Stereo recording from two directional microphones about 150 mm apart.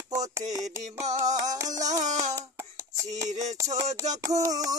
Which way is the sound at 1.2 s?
55° right (ahead or behind).